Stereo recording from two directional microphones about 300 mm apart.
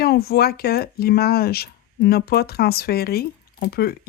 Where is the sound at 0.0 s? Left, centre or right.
Left.